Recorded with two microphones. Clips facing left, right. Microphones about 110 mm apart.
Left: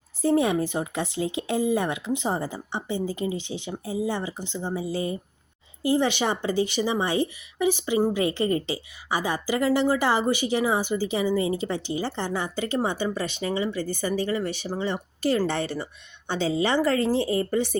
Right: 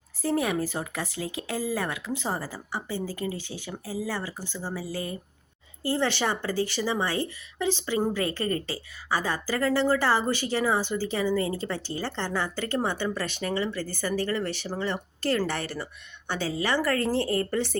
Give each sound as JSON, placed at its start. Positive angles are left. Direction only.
{"t": 0.2, "sound": "speech", "side_deg": 25}